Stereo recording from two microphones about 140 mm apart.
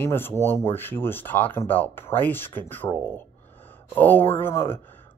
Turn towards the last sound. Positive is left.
turn(degrees=15)  # may be behind; listen again after turning